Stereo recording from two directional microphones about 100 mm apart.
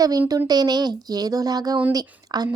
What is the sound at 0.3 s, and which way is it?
Speech, 40° right (ahead or behind).